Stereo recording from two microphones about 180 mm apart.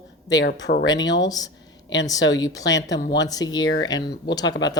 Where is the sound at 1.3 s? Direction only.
20° left (ahead or behind).